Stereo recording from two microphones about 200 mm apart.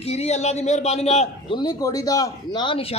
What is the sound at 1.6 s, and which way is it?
A man's voice, 20° left (ahead or behind).